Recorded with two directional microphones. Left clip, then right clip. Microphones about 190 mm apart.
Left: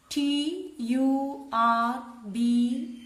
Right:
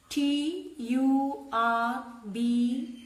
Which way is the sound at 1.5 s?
60° left (ahead or behind).